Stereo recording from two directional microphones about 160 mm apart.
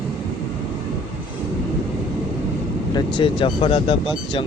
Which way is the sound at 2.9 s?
30° left (ahead or behind).